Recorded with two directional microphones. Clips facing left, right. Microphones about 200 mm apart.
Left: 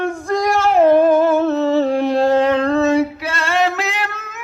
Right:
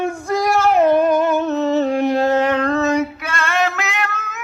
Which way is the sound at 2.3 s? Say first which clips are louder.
Left 2 dB; 30° left (ahead or behind).